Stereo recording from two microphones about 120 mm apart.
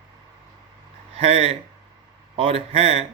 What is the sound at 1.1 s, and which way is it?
Speech, 55° right (ahead or behind).